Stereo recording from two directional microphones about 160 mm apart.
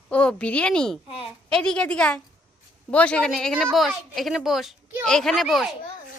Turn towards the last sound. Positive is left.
turn(degrees=0)  # may be behind; listen again after turning